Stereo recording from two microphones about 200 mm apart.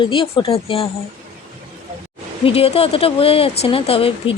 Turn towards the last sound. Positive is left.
turn(degrees=30)  # may be behind; listen again after turning